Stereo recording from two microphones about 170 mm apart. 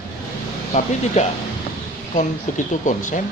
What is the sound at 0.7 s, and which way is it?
Speech, 45° left (ahead or behind).